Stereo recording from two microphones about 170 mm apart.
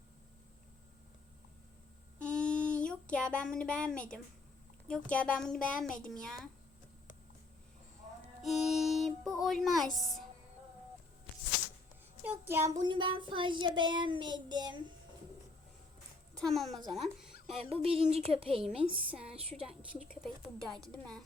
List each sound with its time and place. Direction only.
2.1 s a sound: 5° left (ahead or behind)
4.9 s a woman's voice: 5° left (ahead or behind)
8.4 s a woman's voice: centre (ahead or behind)
12.2 s a child's voice: 10° right (ahead or behind)
12.8 s child singing: 30° right (ahead or behind)
16.4 s a woman's voice: centre (ahead or behind)
17.7 s a woman's voice: 35° right (ahead or behind)
18.6 s a woman's voice: 5° right (ahead or behind)